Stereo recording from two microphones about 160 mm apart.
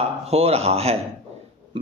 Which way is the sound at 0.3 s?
40° right (ahead or behind).